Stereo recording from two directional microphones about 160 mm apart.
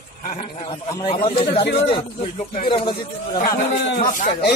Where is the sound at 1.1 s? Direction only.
35° left (ahead or behind).